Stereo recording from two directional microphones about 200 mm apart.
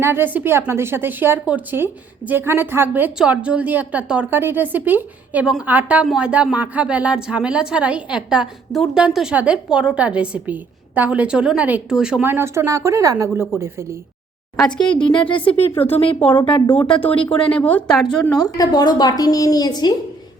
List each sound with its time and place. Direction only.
0.0 s a woman's voice: 10° right (ahead or behind)
14.8 s a woman's voice: 5° left (ahead or behind)
15.3 s a woman's voice: 25° left (ahead or behind)
16.6 s a woman's voice: 10° left (ahead or behind)
18.5 s a woman's voice: 20° left (ahead or behind)